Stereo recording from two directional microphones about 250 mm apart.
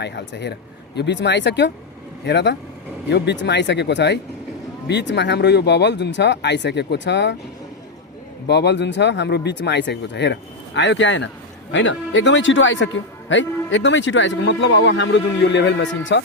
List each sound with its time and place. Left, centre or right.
0.0 s speech: left
8.4 s speech: left